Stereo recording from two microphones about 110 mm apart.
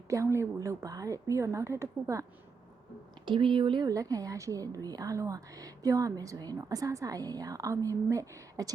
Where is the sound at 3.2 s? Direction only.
50° right (ahead or behind).